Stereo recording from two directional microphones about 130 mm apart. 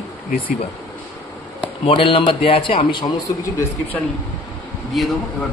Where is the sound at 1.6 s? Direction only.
45° left (ahead or behind).